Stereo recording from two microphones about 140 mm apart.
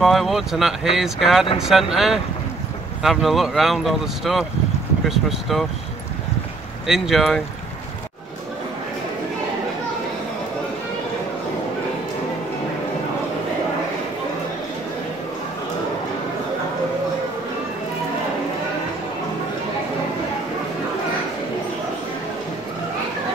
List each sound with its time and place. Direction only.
0.0 s speech: centre (ahead or behind)
6.9 s speech: centre (ahead or behind)